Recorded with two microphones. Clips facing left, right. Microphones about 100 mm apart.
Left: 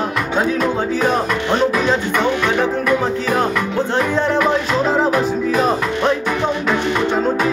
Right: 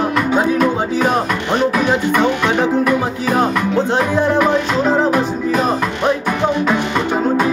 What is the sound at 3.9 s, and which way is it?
Music, 10° right (ahead or behind).